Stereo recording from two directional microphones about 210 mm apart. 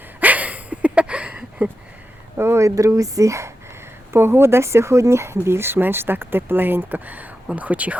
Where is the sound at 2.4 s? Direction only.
15° right (ahead or behind).